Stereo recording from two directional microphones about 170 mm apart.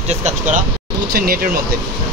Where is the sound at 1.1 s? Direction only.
60° right (ahead or behind).